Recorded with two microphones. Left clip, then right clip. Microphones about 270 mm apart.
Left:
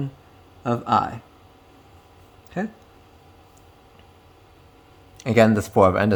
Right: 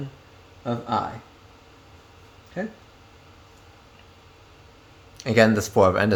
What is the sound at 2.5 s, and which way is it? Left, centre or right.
Speech, left.